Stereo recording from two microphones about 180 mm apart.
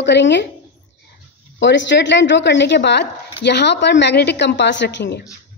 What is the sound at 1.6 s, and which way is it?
A woman's voice, 80° left.